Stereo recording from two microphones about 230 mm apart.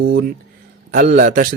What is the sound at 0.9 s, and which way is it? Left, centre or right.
Mantra, right.